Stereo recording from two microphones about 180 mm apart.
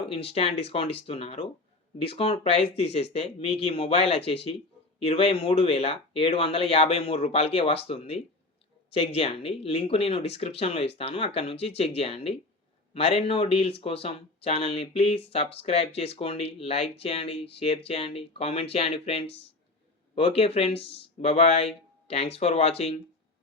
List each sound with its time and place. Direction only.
0.0 s speech: 30° left (ahead or behind)